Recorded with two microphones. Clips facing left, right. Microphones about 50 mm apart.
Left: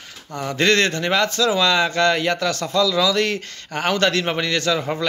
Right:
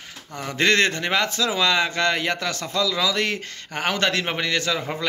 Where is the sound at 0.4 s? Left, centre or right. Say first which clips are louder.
Left 2 dB; centre.